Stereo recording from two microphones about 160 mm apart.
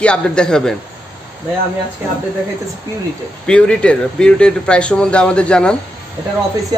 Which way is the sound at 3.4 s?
5° left (ahead or behind).